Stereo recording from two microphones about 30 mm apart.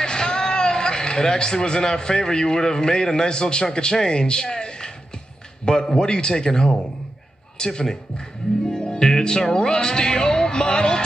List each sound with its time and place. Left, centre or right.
0.0 s a man's voice: left
5.9 s a man's voice: left
8.6 s music: left
9.5 s speech: left